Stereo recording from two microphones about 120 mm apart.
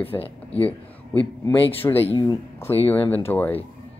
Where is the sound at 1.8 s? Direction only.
15° left (ahead or behind).